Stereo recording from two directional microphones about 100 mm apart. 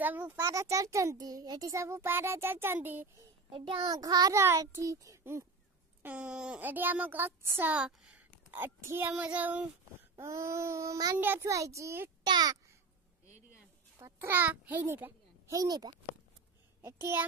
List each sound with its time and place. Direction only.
0.0 s a child's voice: 20° right (ahead or behind)
3.4 s a child's voice: 60° right (ahead or behind)
3.8 s a child's voice: 40° right (ahead or behind)
6.0 s a child's voice: 10° right (ahead or behind)
8.5 s a child's voice: 20° right (ahead or behind)
10.1 s a child's voice: 30° right (ahead or behind)
11.1 s a child's voice: 20° right (ahead or behind)
12.2 s a child's voice: 40° right (ahead or behind)
13.9 s a child's voice: 25° right (ahead or behind)
15.5 s a child's voice: 40° right (ahead or behind)
16.8 s a child's voice: 25° right (ahead or behind)